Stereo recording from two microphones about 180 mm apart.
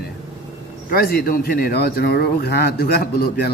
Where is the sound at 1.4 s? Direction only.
60° left (ahead or behind).